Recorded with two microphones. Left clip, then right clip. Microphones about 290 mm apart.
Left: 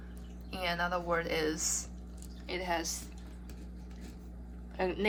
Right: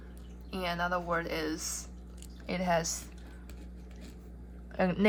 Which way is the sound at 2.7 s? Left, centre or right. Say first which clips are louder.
Right 5 dB; right.